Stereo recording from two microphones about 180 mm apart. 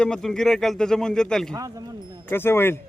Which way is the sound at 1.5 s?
20° right (ahead or behind).